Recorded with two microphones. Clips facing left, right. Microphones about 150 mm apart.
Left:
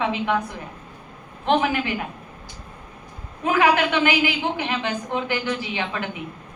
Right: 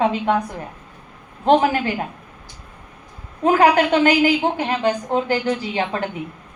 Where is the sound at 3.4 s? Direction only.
40° right (ahead or behind).